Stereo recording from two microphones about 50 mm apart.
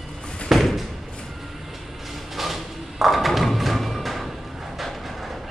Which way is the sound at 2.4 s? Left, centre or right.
Centre.